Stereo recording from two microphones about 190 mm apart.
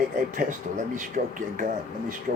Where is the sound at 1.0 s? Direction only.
45° right (ahead or behind).